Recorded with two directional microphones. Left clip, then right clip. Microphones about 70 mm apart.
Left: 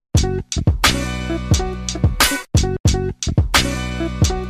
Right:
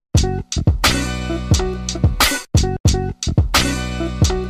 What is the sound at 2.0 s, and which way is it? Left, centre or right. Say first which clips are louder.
Music: even; left.